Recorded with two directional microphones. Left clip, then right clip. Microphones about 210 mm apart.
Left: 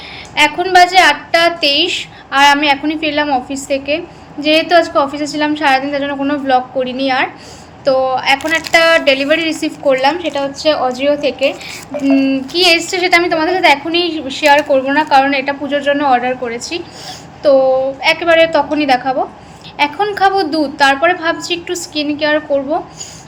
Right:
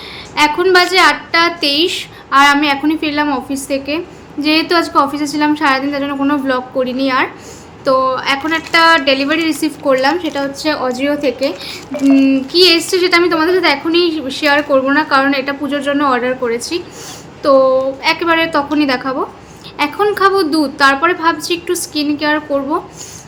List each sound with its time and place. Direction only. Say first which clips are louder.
0.3 s a woman's voice: left 1 dB; 20° right (ahead or behind)
11.9 s a sound: right 2 dB; 15° left (ahead or behind)
12.3 s a woman's voice: right 1 dB; 20° right (ahead or behind)